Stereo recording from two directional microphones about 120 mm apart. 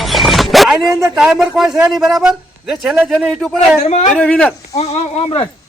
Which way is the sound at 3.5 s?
65° left (ahead or behind).